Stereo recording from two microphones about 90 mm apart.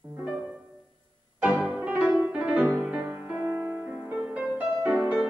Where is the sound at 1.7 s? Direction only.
20° right (ahead or behind).